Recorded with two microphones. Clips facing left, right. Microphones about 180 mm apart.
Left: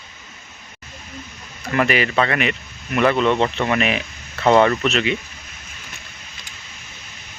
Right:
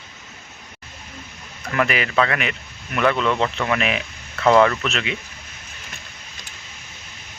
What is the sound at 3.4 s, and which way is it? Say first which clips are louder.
Speech: left 2 dB; 30° left (ahead or behind).